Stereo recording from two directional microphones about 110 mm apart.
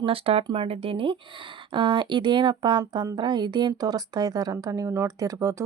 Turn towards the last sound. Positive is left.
turn(degrees=-25)  # may be behind; listen again after turning